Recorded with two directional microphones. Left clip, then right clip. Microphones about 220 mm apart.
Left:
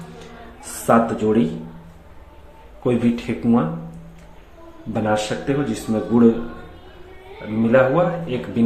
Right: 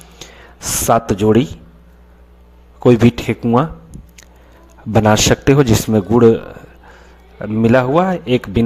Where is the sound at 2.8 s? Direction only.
50° right (ahead or behind).